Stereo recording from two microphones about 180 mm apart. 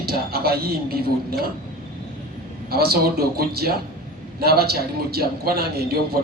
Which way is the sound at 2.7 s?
60° right (ahead or behind).